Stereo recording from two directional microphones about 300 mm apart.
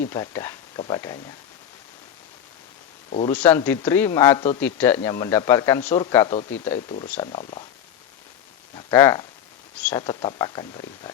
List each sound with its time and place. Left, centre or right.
0.1 s speech: centre
3.1 s speech: centre
3.3 s speech: centre
8.7 s speech: centre